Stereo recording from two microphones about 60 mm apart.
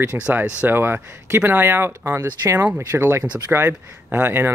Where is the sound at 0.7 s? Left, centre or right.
Right.